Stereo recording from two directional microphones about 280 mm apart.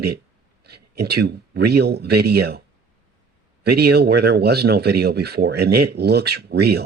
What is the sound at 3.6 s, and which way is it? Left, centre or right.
Speech, right.